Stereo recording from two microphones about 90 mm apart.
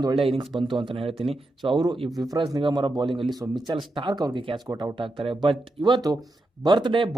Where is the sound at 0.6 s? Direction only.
65° right (ahead or behind).